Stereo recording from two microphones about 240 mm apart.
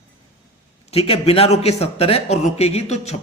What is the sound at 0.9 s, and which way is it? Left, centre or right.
A man's voice, left.